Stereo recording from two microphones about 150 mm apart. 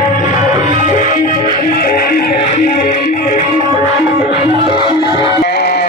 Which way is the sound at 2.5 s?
55° left (ahead or behind).